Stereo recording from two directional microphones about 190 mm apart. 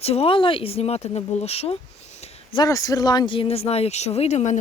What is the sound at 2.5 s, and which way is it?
Speech, 20° left (ahead or behind).